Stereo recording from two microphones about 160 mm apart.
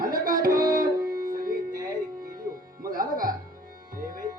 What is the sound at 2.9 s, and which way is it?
Music, 60° right (ahead or behind).